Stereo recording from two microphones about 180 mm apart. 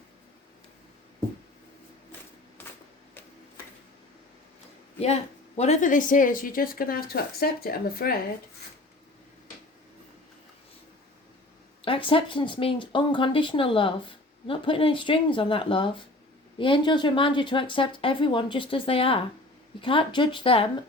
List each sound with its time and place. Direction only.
4.9 s a woman's voice: 35° left (ahead or behind); by 8.1 s 55° left (ahead or behind)
11.9 s speech: 30° left (ahead or behind)